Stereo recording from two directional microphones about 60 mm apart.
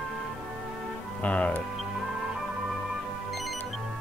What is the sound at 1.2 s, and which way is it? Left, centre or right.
Speech, left.